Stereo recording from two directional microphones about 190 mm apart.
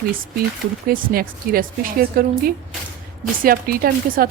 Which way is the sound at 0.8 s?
50° right (ahead or behind).